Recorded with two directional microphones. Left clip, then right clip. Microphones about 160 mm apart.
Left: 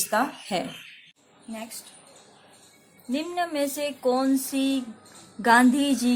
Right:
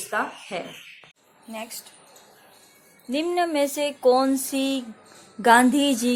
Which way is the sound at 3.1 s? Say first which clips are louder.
Right 4 dB; 35° right (ahead or behind).